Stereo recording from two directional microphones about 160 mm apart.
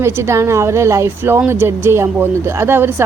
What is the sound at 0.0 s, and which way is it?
A woman's voice, 15° right (ahead or behind).